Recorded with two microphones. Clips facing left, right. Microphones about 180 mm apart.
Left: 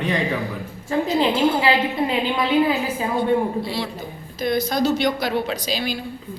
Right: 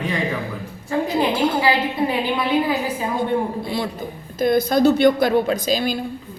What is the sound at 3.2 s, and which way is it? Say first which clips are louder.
A woman's voice: left 3 dB; 50° right (ahead or behind).